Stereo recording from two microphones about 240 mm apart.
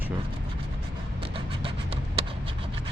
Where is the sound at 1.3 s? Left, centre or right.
Right.